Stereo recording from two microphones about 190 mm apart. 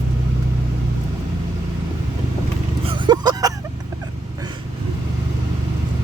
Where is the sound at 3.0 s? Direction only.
20° right (ahead or behind).